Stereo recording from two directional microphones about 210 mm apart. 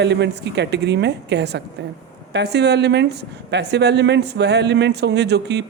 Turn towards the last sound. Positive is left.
turn(degrees=-55)  # may be behind; listen again after turning